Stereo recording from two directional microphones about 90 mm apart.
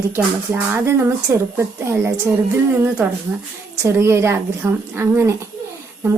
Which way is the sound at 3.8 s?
30° right (ahead or behind).